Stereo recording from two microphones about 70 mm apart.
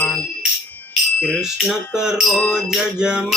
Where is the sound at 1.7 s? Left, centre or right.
Centre.